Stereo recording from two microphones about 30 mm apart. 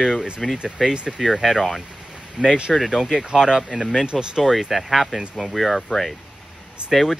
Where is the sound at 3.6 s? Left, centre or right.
Centre.